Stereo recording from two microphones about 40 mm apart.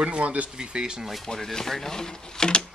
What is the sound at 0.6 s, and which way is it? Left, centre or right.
Speech, centre.